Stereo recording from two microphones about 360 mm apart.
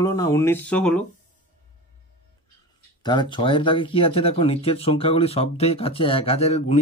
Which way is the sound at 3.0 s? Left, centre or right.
Centre.